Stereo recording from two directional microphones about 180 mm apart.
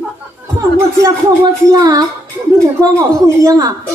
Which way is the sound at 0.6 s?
15° right (ahead or behind).